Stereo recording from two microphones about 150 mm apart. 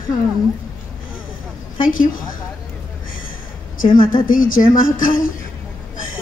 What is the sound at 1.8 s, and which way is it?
Speech, 65° left (ahead or behind).